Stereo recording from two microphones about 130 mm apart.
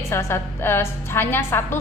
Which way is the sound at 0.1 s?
20° left (ahead or behind).